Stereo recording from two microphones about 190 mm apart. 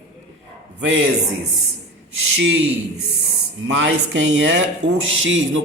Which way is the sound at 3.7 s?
70° right (ahead or behind).